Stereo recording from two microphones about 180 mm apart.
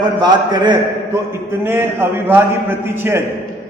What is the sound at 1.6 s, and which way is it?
A man's voice, 15° right (ahead or behind).